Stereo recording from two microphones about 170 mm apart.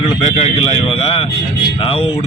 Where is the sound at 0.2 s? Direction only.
35° left (ahead or behind).